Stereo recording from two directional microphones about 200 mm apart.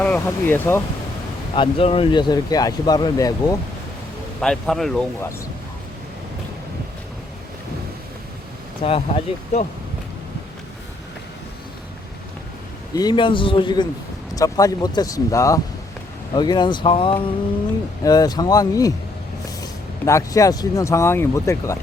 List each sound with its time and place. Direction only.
0.3 s speech: 10° left (ahead or behind)
1.5 s speech: 25° left (ahead or behind)
4.4 s speech: centre (ahead or behind)
8.8 s speech: 30° left (ahead or behind)
12.9 s speech: 20° left (ahead or behind)
20.1 s speech: 15° left (ahead or behind)